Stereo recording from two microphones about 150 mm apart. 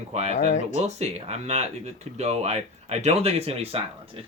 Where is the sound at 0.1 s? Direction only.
45° right (ahead or behind).